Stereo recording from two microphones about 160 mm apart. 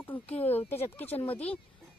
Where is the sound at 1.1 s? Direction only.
35° left (ahead or behind).